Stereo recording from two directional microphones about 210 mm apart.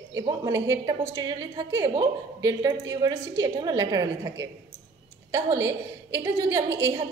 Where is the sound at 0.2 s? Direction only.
20° right (ahead or behind).